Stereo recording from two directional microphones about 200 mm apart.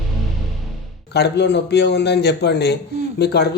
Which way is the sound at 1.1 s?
60° left (ahead or behind).